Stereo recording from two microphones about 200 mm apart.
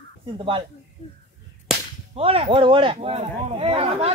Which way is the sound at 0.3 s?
25° right (ahead or behind).